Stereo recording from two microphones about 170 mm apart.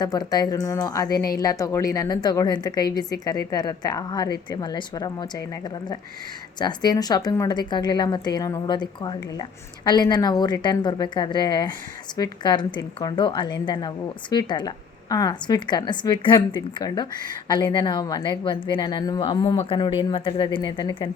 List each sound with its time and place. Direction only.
0.0 s a woman's voice: 25° left (ahead or behind)